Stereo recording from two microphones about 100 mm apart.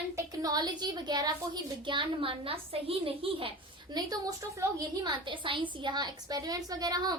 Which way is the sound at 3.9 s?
40° right (ahead or behind).